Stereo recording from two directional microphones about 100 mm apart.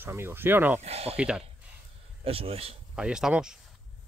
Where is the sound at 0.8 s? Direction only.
90° right.